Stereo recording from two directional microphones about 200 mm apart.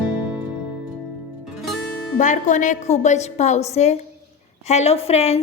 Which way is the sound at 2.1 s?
40° left (ahead or behind).